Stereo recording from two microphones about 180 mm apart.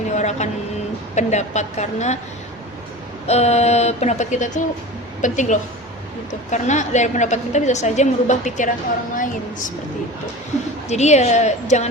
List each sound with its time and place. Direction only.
0.2 s vehicle: 40° left (ahead or behind)
1.1 s a woman's voice: 40° left (ahead or behind)
3.2 s a woman's voice: 35° left (ahead or behind)
10.8 s a woman's voice: 40° left (ahead or behind)